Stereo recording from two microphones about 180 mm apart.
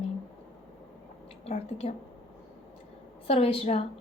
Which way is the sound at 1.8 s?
30° left (ahead or behind).